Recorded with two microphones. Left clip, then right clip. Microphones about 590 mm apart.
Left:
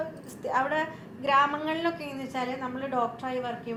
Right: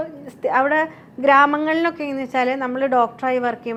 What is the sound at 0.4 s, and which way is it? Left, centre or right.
A woman's voice, right.